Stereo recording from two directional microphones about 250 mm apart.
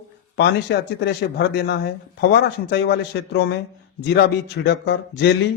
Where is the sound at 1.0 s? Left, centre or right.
Left.